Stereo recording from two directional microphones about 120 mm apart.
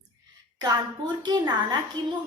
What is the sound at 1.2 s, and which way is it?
Speech, 35° right (ahead or behind).